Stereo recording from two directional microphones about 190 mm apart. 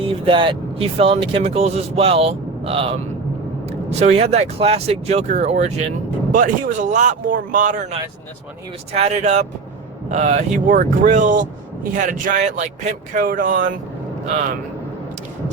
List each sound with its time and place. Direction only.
0.3 s speech: 25° right (ahead or behind)
4.0 s speech: 35° right (ahead or behind)
8.9 s speech: 35° right (ahead or behind)